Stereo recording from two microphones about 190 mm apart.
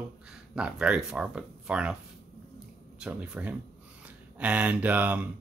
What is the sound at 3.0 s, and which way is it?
Speech, 5° right (ahead or behind).